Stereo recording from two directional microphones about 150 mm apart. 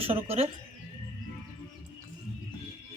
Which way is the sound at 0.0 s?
40° right (ahead or behind).